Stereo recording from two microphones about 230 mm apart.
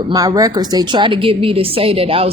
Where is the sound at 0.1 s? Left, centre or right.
Centre.